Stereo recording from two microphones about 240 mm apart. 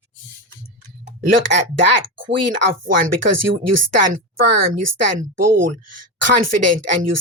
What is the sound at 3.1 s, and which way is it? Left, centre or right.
Speech, right.